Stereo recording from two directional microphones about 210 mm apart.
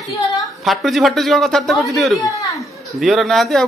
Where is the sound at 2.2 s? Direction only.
15° left (ahead or behind).